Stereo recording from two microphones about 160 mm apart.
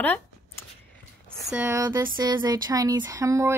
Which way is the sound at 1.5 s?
15° right (ahead or behind).